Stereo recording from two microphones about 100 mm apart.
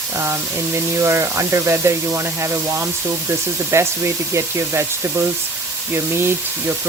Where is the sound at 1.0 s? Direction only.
25° right (ahead or behind).